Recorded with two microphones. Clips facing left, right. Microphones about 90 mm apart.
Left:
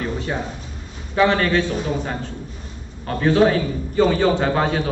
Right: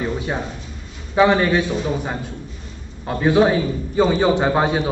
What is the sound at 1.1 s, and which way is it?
A man's voice, 15° right (ahead or behind).